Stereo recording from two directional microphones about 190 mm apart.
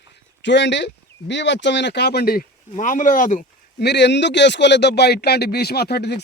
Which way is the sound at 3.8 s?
65° left (ahead or behind).